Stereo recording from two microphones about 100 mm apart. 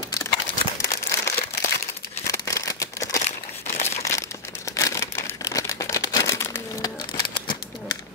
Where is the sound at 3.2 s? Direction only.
90° left.